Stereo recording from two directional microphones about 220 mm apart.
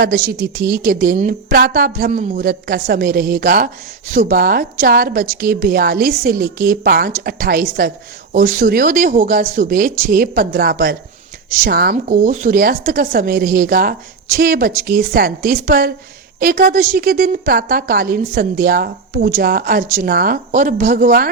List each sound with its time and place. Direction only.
0.3 s a woman's voice: 45° right (ahead or behind)